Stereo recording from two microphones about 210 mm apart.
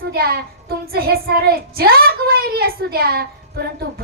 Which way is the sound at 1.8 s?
45° right (ahead or behind).